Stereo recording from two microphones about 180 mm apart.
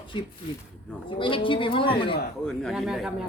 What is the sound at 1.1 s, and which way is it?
A woman's voice, 30° left (ahead or behind).